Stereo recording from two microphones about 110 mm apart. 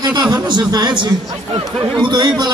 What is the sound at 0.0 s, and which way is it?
A man's voice, 45° right (ahead or behind).